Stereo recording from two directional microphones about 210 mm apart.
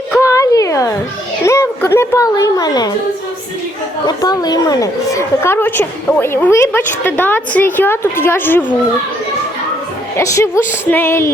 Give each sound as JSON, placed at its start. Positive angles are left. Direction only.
{"t": 0.1, "sound": "a sound", "side_deg": 15}
{"t": 1.5, "sound": "a woman's voice", "side_deg": 10}
{"t": 4.0, "sound": "a woman's voice", "side_deg": 20}
{"t": 10.2, "sound": "a woman's voice", "side_deg": 15}